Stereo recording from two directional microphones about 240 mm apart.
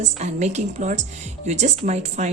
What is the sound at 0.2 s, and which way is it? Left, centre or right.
Speech, right.